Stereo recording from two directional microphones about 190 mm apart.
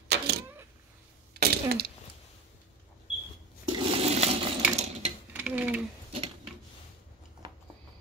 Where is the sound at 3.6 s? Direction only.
30° right (ahead or behind).